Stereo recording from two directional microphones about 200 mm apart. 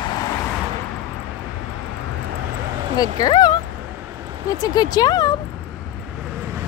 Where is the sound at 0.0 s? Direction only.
20° left (ahead or behind).